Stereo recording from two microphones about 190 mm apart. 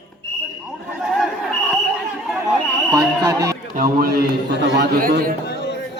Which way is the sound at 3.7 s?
50° right (ahead or behind).